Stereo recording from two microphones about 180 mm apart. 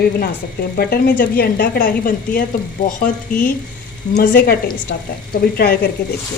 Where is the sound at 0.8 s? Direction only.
60° left (ahead or behind).